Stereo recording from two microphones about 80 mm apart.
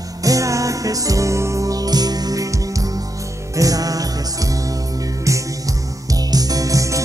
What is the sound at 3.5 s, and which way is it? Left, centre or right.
Music, right.